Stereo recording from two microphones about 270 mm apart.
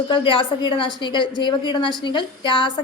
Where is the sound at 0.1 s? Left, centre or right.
Centre.